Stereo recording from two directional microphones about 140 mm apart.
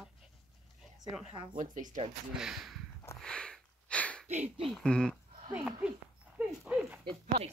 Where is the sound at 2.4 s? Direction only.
Centre (ahead or behind).